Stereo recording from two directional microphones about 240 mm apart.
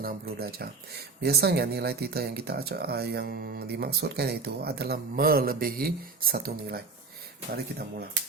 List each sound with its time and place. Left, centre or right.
0.0 s speech: right